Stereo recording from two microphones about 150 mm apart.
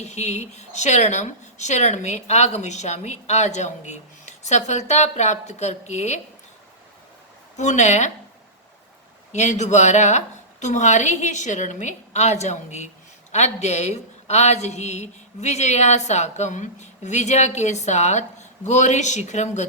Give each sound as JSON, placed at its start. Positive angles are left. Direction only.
{"t": 0.0, "sound": "a woman's voice", "side_deg": 50}
{"t": 7.5, "sound": "a woman's voice", "side_deg": 50}
{"t": 9.3, "sound": "a woman's voice", "side_deg": 50}